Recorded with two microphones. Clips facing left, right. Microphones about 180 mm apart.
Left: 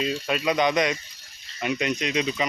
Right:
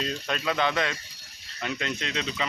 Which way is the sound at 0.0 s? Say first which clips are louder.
Left 4 dB; 10° left (ahead or behind).